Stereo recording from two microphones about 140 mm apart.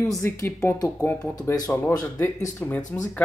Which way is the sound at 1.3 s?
25° left (ahead or behind).